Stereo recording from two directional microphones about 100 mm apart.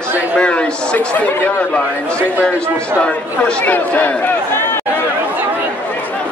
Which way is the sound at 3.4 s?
20° left (ahead or behind).